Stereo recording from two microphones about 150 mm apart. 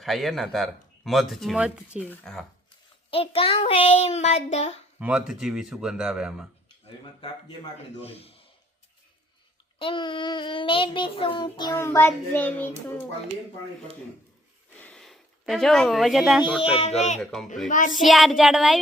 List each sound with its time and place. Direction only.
0.0 s speech: centre (ahead or behind)
2.0 s speech: 5° left (ahead or behind)
3.1 s child singing: 40° left (ahead or behind)
4.9 s speech: 10° right (ahead or behind)
8.0 s child singing: 40° left (ahead or behind)
9.7 s child singing: 35° left (ahead or behind)
11.8 s a child's voice: 15° left (ahead or behind)
14.8 s a sound: 5° left (ahead or behind)
16.7 s child singing: 40° left (ahead or behind)
17.7 s a child's voice: 60° left (ahead or behind)
17.9 s speech: centre (ahead or behind)